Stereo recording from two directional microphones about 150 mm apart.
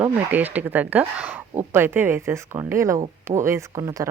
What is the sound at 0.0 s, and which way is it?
Speech, 10° right (ahead or behind).